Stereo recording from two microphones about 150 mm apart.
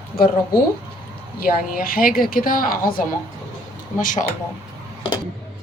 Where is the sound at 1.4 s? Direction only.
75° left (ahead or behind).